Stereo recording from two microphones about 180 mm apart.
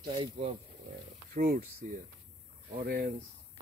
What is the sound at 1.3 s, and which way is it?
Speech, 50° right (ahead or behind).